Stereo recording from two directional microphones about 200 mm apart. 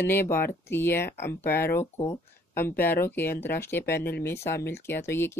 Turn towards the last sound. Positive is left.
turn(degrees=10)  # may be behind; listen again after turning